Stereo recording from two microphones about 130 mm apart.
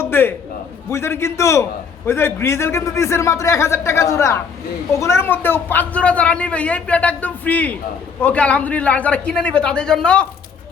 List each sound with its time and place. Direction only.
0.0 s a man's voice: 15° left (ahead or behind)